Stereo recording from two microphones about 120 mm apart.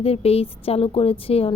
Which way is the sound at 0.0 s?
55° left (ahead or behind).